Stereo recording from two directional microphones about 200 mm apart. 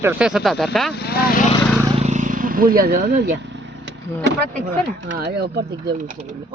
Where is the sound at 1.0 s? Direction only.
50° left (ahead or behind).